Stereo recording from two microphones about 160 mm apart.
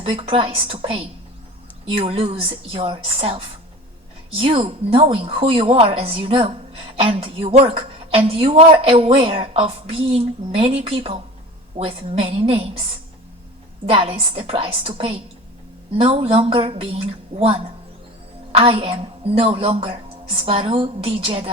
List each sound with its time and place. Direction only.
0.0 s a woman's voice: 35° right (ahead or behind)
13.8 s a woman's voice: 35° right (ahead or behind)